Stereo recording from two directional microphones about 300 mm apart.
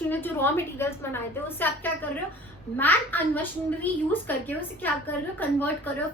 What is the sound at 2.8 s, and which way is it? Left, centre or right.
A woman's voice, centre.